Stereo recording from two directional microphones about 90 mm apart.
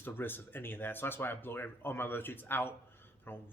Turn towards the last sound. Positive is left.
turn(degrees=25)  # may be behind; listen again after turning